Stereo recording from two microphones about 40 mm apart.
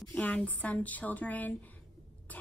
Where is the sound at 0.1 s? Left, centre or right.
Left.